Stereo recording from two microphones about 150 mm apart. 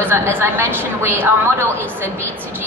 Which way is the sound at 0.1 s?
15° right (ahead or behind).